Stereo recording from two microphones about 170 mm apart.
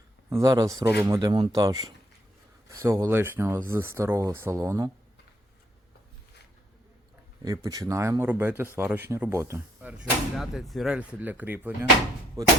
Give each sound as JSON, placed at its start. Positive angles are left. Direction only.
{"t": 0.3, "sound": "speech", "side_deg": -20}
{"t": 7.4, "sound": "speech", "side_deg": -20}
{"t": 12.4, "sound": "speech", "side_deg": -20}